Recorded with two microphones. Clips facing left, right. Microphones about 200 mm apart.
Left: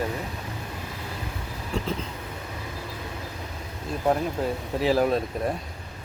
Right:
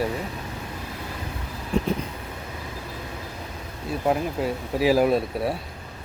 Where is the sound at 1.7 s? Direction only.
20° right (ahead or behind).